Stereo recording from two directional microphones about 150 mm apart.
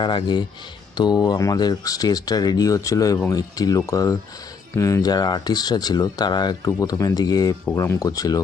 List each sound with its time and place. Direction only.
0.0 s speech: 30° left (ahead or behind)
7.6 s speech: 15° left (ahead or behind)